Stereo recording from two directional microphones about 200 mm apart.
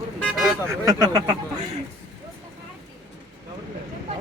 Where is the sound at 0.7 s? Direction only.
15° right (ahead or behind).